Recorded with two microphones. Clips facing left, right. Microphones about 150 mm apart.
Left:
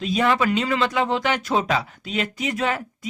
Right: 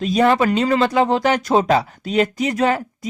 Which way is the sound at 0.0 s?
40° right (ahead or behind).